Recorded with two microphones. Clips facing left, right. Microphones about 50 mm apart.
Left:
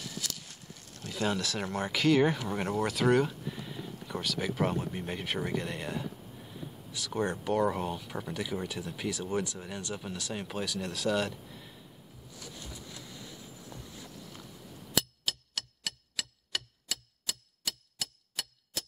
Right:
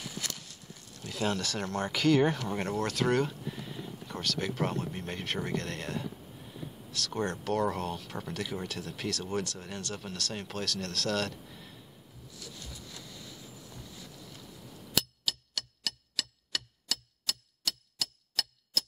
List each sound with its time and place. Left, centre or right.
0.2 s a sound: right
1.0 s speech: centre
12.4 s vehicle: left
15.2 s clock: left